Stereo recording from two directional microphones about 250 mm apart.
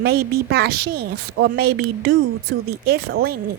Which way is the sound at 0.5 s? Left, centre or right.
Right.